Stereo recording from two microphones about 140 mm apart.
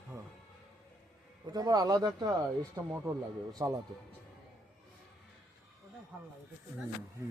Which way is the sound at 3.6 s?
30° right (ahead or behind).